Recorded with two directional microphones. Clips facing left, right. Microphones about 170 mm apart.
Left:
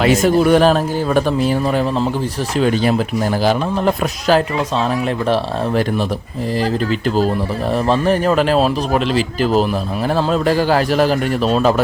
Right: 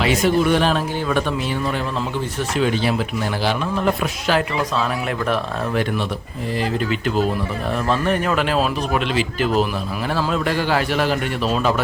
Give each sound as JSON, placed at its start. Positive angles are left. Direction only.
{"t": 0.0, "sound": "speech", "side_deg": 45}
{"t": 2.6, "sound": "speech", "side_deg": 40}
{"t": 7.9, "sound": "speech", "side_deg": 35}